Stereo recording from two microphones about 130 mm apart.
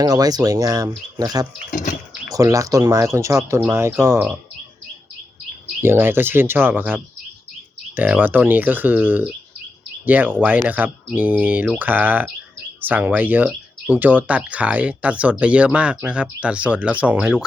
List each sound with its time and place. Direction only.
0.0 s speech: 30° right (ahead or behind)
1.7 s a sound: 85° left
2.3 s speech: 25° right (ahead or behind)
5.8 s speech: 15° right (ahead or behind)